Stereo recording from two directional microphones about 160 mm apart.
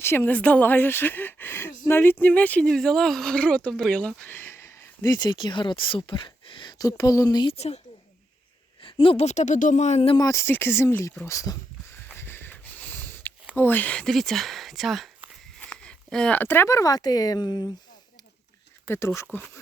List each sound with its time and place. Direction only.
0.0 s speech: 15° left (ahead or behind)
7.5 s a woman's voice: 40° left (ahead or behind)
8.8 s a woman's voice: 35° left (ahead or behind)
10.2 s speech: 20° left (ahead or behind)
12.0 s a sound: 15° left (ahead or behind)
13.6 s speech: 10° left (ahead or behind)
18.9 s speech: 15° left (ahead or behind)